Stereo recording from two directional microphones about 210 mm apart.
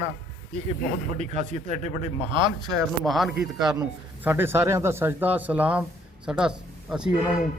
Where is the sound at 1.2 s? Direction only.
30° right (ahead or behind).